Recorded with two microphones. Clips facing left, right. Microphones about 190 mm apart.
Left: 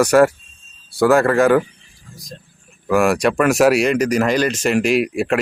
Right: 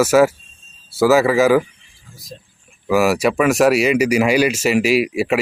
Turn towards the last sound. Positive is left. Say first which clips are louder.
# right 1 dB
turn(degrees=-5)  # may be behind; listen again after turning